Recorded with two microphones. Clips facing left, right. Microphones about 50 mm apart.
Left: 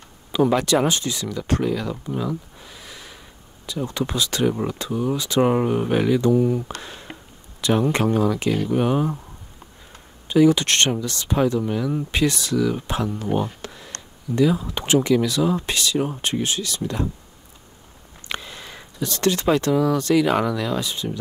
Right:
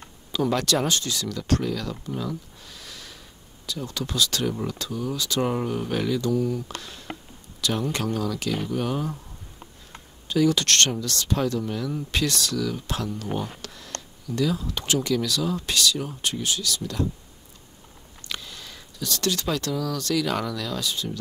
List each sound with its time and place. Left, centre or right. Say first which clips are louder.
0.3 s speech: left 5 dB; centre
6.8 s a sound: left 1 dB; left
7.6 s speech: left 7 dB; left
10.2 s speech: left 5 dB; centre
18.3 s speech: left 5 dB; left